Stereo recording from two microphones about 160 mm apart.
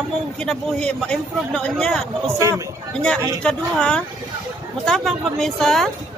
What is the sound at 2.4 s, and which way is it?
Speech, 20° right (ahead or behind).